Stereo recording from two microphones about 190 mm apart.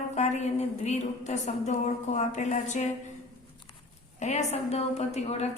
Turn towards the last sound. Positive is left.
turn(degrees=35)  # may be behind; listen again after turning